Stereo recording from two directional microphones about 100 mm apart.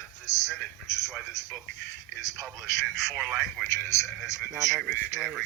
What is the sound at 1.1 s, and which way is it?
Speech, centre (ahead or behind).